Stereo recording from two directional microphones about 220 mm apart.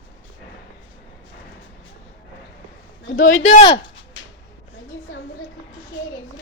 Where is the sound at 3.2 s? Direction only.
35° left (ahead or behind).